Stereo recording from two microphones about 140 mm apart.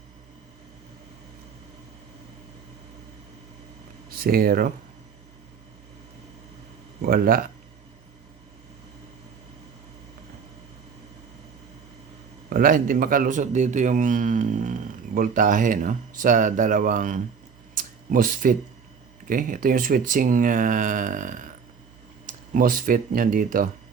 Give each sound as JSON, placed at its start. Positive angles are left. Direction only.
{"t": 4.2, "sound": "speech", "side_deg": -90}
{"t": 7.1, "sound": "speech", "side_deg": -90}
{"t": 12.5, "sound": "a man's voice", "side_deg": -85}
{"t": 17.7, "sound": "a sound", "side_deg": -80}
{"t": 19.3, "sound": "a man's voice", "side_deg": -75}